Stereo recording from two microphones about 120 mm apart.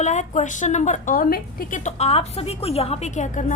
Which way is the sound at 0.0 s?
85° left.